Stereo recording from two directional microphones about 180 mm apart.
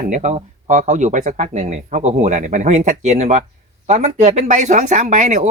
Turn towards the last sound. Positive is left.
turn(degrees=-40)  # may be behind; listen again after turning